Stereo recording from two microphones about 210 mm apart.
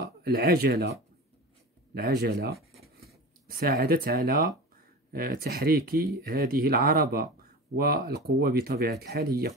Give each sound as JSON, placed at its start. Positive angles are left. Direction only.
{"t": 0.2, "sound": "speech", "side_deg": -50}
{"t": 2.2, "sound": "speech", "side_deg": -50}